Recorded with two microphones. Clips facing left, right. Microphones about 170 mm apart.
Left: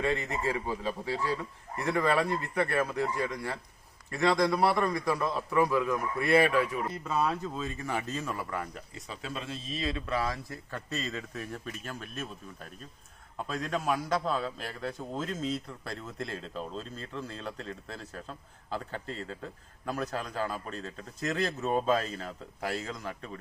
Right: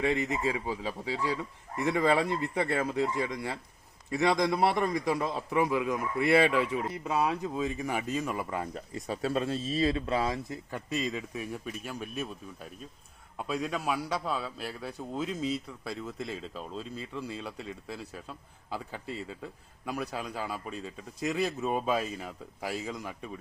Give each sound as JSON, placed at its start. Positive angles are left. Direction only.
{"t": 0.0, "sound": "a man's voice", "side_deg": -15}
{"t": 8.7, "sound": "speech", "side_deg": -40}
{"t": 13.5, "sound": "a man's voice", "side_deg": -5}